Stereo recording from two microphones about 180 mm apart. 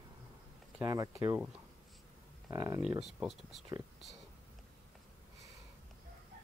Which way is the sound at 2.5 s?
15° right (ahead or behind).